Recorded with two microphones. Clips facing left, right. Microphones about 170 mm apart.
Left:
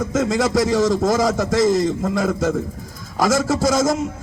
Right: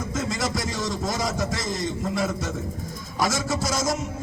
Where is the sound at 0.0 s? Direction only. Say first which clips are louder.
Left 9 dB; 90° left.